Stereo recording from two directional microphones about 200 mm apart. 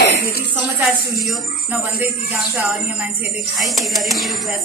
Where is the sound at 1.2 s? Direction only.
5° right (ahead or behind).